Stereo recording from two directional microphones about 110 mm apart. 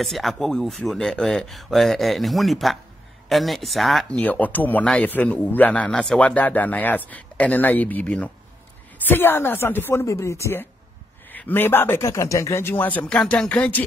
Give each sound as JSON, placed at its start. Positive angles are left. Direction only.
{"t": 0.0, "sound": "speech", "side_deg": 0}
{"t": 4.2, "sound": "a man's voice", "side_deg": 15}